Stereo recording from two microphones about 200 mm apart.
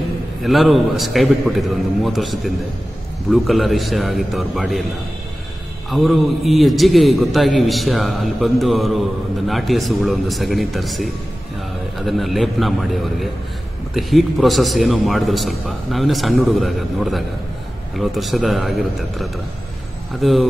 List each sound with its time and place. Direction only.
0.4 s a man's voice: centre (ahead or behind)
5.9 s a man's voice: centre (ahead or behind)